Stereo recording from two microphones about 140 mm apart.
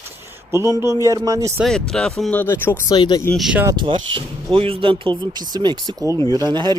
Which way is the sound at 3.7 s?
35° right (ahead or behind).